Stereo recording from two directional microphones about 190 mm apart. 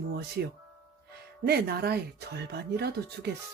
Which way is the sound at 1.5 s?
55° right (ahead or behind).